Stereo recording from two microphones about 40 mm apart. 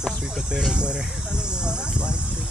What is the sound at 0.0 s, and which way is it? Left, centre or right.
Speech, centre.